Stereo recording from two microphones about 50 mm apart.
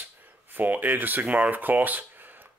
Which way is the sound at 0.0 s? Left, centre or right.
Right.